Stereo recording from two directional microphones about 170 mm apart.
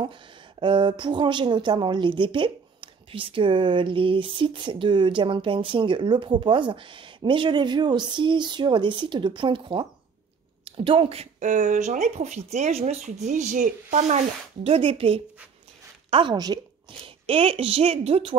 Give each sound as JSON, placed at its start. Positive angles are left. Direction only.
{"t": 0.0, "sound": "a woman's voice", "side_deg": -30}